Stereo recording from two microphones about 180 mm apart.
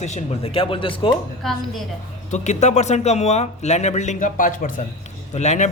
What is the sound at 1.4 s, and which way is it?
Speech, centre (ahead or behind).